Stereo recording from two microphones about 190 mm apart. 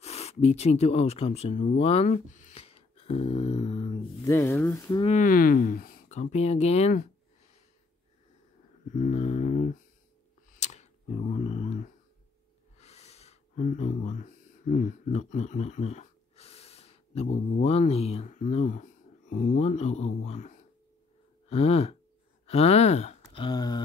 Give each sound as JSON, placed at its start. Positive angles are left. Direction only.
{"t": 0.0, "sound": "speech", "side_deg": 35}
{"t": 4.3, "sound": "speech", "side_deg": 15}
{"t": 4.8, "sound": "speech", "side_deg": 25}
{"t": 5.1, "sound": "speech", "side_deg": 45}
{"t": 8.9, "sound": "a sound", "side_deg": 40}
{"t": 12.7, "sound": "speech", "side_deg": 35}
{"t": 20.2, "sound": "a sound", "side_deg": 40}
{"t": 22.5, "sound": "speech", "side_deg": 35}